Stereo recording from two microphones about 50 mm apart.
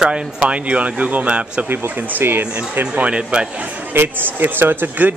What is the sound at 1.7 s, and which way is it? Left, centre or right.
Speech, right.